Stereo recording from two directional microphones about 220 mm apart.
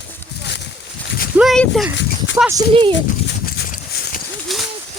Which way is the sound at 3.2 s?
45° left (ahead or behind).